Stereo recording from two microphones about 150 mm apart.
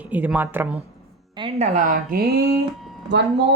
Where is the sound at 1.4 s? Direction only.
45° right (ahead or behind); by 2.4 s 80° right.